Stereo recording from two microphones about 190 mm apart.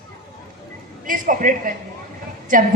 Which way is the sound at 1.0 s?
45° right (ahead or behind).